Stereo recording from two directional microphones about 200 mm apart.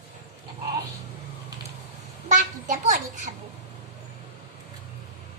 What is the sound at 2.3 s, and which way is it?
A child's voice, 40° right (ahead or behind).